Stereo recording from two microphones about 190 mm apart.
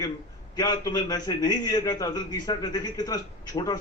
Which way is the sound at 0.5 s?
20° left (ahead or behind).